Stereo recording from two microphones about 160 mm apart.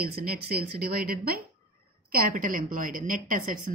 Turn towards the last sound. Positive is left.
turn(degrees=-60)  # may be behind; listen again after turning